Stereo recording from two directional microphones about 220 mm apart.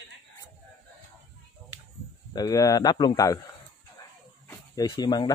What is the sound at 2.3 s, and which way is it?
Speech, 15° left (ahead or behind).